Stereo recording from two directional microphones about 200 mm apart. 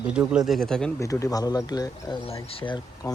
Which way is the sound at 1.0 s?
15° left (ahead or behind).